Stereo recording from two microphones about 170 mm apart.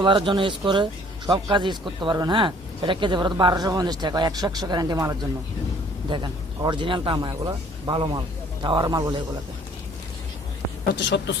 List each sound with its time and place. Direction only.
0.0 s speech: 30° right (ahead or behind)
10.8 s speech: 90° left